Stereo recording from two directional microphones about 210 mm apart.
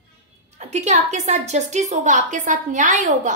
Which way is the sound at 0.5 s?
35° right (ahead or behind).